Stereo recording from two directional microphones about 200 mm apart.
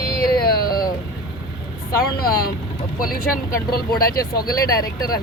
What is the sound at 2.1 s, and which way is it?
Speech, 50° left (ahead or behind).